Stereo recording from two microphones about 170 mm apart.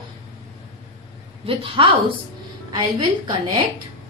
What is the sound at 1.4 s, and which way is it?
Child singing, 30° right (ahead or behind).